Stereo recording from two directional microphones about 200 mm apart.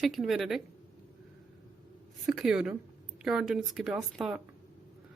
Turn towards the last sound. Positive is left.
turn(degrees=0)  # may be behind; listen again after turning